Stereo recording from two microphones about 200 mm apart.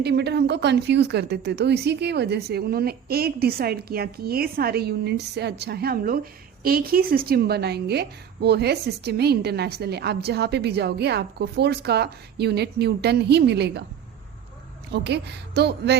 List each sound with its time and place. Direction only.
0.0 s a woman's voice: 55° right (ahead or behind)
14.9 s a woman's voice: 55° right (ahead or behind)